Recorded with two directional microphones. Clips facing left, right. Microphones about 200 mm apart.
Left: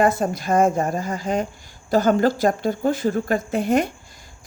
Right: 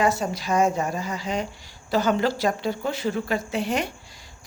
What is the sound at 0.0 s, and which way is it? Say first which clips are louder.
Speech: left 4 dB; 55° left (ahead or behind).